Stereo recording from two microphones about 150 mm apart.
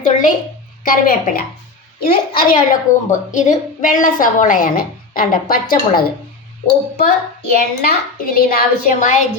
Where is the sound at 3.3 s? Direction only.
55° left (ahead or behind); by 6.0 s 75° left (ahead or behind).